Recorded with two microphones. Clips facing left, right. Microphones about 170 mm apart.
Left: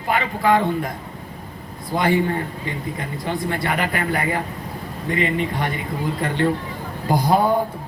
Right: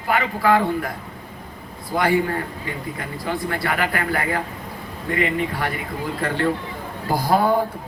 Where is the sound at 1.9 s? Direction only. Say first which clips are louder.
Even; 20° left (ahead or behind).